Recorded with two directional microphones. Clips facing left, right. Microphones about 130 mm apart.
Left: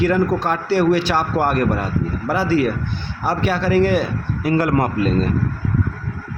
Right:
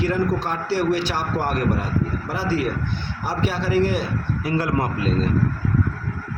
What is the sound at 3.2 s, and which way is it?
Speech, 70° left (ahead or behind).